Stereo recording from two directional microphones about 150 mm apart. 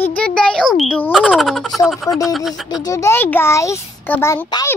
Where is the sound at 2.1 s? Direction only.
25° left (ahead or behind).